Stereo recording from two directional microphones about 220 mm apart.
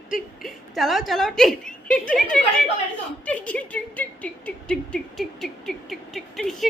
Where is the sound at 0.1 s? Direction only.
Centre (ahead or behind).